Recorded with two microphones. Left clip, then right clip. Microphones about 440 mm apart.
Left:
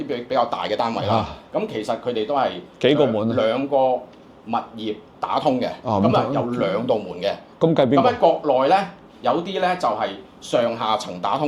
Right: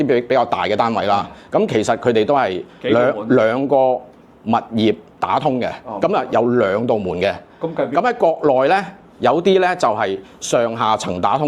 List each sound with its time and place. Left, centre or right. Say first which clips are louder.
0.0 s speech: right 6 dB; right
7.7 s speech: left 3 dB; left
7.9 s speech: right 1 dB; right